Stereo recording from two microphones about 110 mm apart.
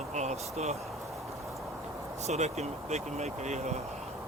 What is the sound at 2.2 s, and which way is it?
Speech, 90° right.